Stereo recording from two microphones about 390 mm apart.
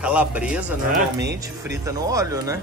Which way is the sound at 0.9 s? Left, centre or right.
Right.